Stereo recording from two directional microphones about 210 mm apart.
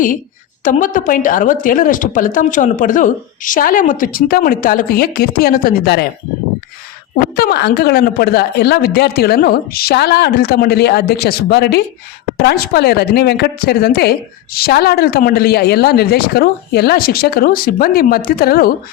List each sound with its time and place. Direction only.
0.6 s speech: 40° left (ahead or behind)
7.3 s a woman's voice: 50° left (ahead or behind)